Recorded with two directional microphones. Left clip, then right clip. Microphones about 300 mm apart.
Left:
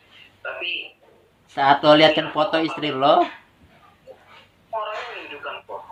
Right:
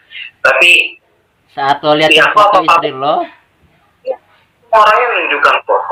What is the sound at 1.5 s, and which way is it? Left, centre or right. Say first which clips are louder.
Speech: right 3 dB; centre.